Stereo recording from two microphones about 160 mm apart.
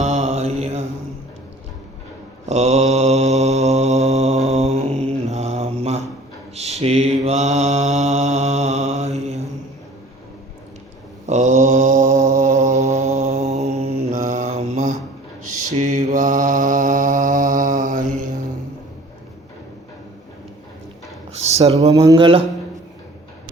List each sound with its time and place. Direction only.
0.0 s mantra: 45° right (ahead or behind)
2.5 s mantra: 45° right (ahead or behind)
6.6 s a sound: 40° right (ahead or behind)
7.3 s mantra: 45° right (ahead or behind)
11.3 s mantra: 45° right (ahead or behind)
21.4 s speech: 40° right (ahead or behind)
21.9 s speech: 25° right (ahead or behind)